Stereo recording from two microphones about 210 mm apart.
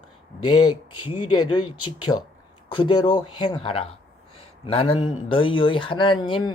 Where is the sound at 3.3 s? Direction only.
20° left (ahead or behind).